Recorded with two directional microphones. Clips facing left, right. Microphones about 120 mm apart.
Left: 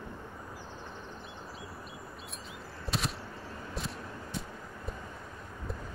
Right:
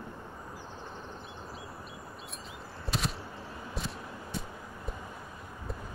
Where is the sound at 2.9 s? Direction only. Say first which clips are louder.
Right 1 dB; centre (ahead or behind).